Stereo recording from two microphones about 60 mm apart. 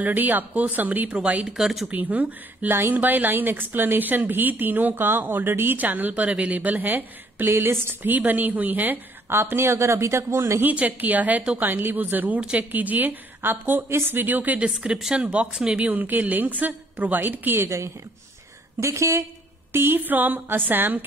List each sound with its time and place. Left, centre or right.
0.0 s speech: right
1.6 s speech: centre
1.9 s a woman's voice: right
10.6 s a woman's voice: right
12.4 s speech: centre
12.7 s a woman's voice: right
14.7 s speech: centre
15.9 s a woman's voice: right
17.6 s a woman's voice: right
19.7 s a woman's voice: right